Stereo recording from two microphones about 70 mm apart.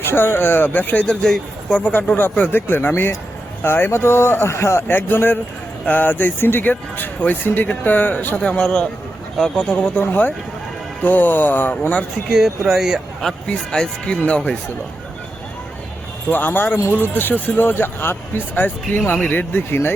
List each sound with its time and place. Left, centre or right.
0.0 s speech: left
1.2 s speech: centre
1.8 s speech: left
12.3 s speech: centre
13.2 s speech: centre
16.3 s speech: left